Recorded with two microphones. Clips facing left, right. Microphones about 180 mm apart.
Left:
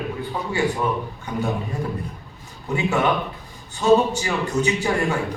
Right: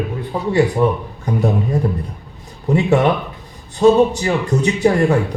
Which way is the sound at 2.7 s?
35° right (ahead or behind).